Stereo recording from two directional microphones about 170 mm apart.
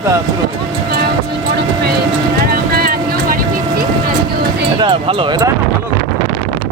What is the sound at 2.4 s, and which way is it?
Vehicle, 60° right (ahead or behind).